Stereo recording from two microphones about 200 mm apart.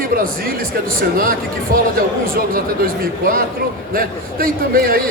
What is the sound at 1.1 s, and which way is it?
A man's voice, 45° right (ahead or behind).